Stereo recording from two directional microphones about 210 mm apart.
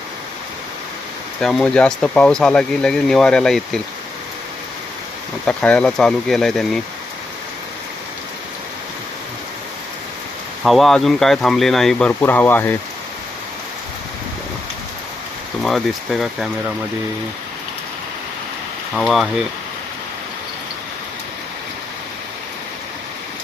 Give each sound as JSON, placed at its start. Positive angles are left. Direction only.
{"t": 1.4, "sound": "speech", "side_deg": 0}
{"t": 5.5, "sound": "speech", "side_deg": 5}
{"t": 10.6, "sound": "speech", "side_deg": 0}
{"t": 15.6, "sound": "speech", "side_deg": 0}
{"t": 18.9, "sound": "speech", "side_deg": 0}